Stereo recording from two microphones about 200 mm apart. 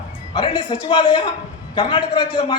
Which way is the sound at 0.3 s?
25° left (ahead or behind).